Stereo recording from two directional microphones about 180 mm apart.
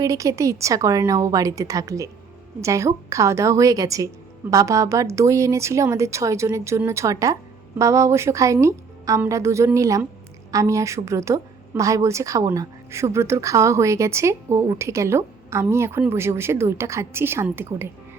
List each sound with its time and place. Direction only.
0.0 s a woman's voice: 15° right (ahead or behind)